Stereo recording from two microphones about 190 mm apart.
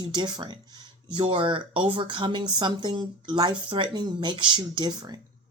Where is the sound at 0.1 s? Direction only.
25° right (ahead or behind).